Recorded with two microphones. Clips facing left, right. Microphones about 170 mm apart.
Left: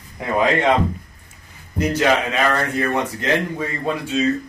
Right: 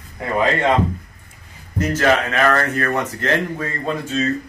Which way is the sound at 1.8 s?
15° left (ahead or behind).